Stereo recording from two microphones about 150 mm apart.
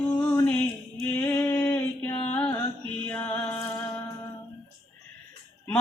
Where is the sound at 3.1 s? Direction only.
10° left (ahead or behind).